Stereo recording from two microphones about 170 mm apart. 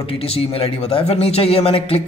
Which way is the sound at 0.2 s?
35° left (ahead or behind).